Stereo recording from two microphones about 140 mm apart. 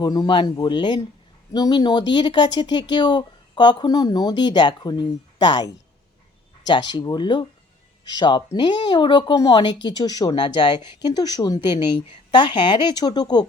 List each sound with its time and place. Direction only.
0.0 s speech: 30° left (ahead or behind)